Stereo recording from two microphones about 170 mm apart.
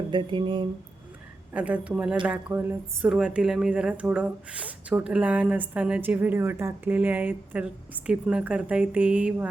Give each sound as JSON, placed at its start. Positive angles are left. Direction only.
{"t": 0.1, "sound": "speech", "side_deg": -30}
{"t": 1.5, "sound": "speech", "side_deg": -10}